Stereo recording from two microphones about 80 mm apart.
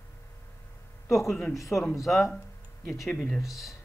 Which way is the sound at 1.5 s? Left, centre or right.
Left.